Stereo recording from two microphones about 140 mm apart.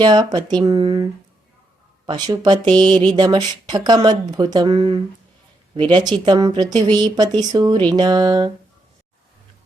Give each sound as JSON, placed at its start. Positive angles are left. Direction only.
{"t": 0.0, "sound": "a woman's voice", "side_deg": -30}
{"t": 2.0, "sound": "a woman's voice", "side_deg": -30}